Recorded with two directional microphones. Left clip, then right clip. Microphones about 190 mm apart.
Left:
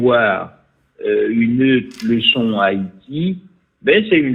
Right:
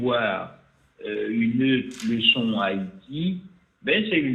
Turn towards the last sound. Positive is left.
turn(degrees=50)  # may be behind; listen again after turning